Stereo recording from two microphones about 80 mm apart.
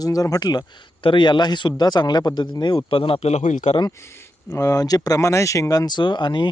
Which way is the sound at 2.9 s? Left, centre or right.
Left.